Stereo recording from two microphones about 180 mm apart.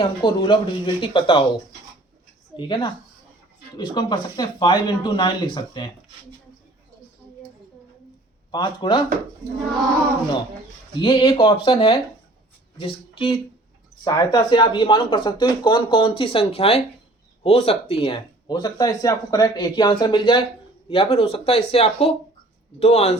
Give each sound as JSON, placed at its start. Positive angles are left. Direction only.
{"t": 0.0, "sound": "speech", "side_deg": 25}
{"t": 2.6, "sound": "speech", "side_deg": 25}
{"t": 8.4, "sound": "speech", "side_deg": 25}
{"t": 11.0, "sound": "speech", "side_deg": 25}